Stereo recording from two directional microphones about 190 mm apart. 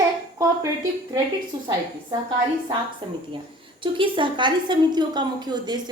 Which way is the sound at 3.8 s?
25° right (ahead or behind).